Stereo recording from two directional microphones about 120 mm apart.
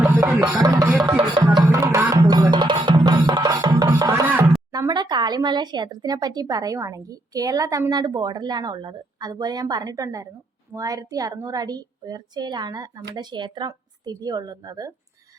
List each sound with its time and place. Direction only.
0.3 s music: 15° right (ahead or behind)
0.6 s music: 30° right (ahead or behind)
1.7 s music: 25° right (ahead or behind)
4.7 s speech: 30° right (ahead or behind)